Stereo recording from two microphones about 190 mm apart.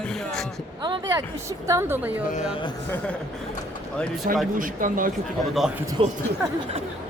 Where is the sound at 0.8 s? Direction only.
25° right (ahead or behind).